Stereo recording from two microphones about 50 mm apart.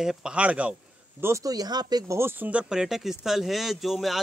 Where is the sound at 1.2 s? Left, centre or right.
Right.